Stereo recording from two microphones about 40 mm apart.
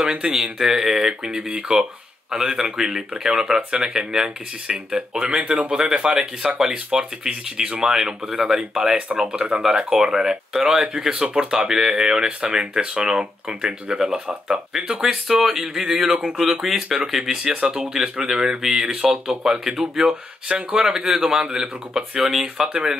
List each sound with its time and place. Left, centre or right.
0.0 s speech: centre
12.3 s speech: right
12.5 s speech: centre
15.0 s speech: centre